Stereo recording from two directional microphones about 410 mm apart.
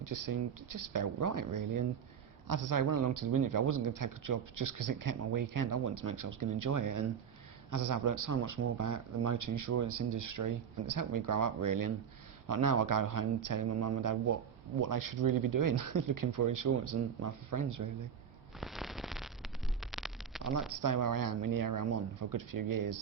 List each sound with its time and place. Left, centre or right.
0.0 s a man's voice: right
18.6 s a sound: centre
20.4 s a man's voice: right